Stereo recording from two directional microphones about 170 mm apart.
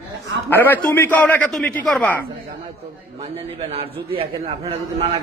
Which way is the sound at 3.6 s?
35° right (ahead or behind).